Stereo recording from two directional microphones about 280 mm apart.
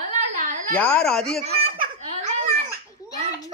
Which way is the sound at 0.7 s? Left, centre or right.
Centre.